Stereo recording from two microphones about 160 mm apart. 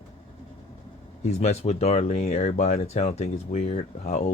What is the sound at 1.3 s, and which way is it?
Speech, 40° left (ahead or behind).